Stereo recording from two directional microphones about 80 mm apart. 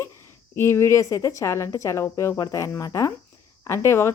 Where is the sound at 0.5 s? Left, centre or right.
Left.